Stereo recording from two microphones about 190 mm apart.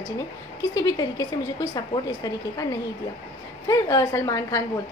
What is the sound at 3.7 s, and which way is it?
Speech, 15° left (ahead or behind).